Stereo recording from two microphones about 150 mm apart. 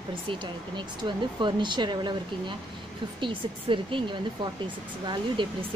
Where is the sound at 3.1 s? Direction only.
35° right (ahead or behind).